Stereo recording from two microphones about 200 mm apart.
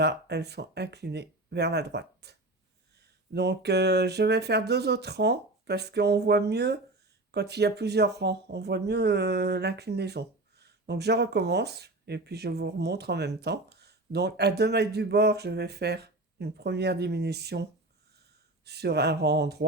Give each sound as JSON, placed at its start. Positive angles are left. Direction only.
{"t": 0.0, "sound": "speech", "side_deg": -55}
{"t": 3.3, "sound": "speech", "side_deg": -55}